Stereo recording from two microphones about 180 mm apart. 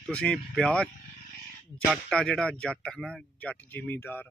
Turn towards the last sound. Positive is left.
turn(degrees=10)  # may be behind; listen again after turning